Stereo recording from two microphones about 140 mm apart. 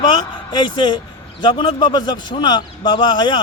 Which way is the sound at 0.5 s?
30° left (ahead or behind).